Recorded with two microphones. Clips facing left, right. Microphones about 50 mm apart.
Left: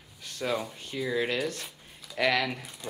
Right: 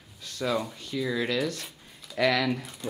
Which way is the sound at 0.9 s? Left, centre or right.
Centre.